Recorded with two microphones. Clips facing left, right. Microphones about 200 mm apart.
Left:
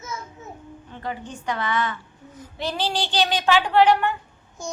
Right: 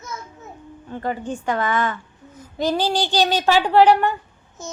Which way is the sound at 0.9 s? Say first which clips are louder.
Right 7 dB; 45° right (ahead or behind).